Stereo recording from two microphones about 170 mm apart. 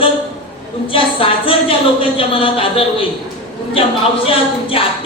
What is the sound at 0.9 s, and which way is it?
A woman's voice, 30° left (ahead or behind).